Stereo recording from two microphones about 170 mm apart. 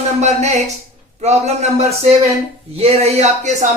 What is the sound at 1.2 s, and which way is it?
A man's voice, 40° right (ahead or behind).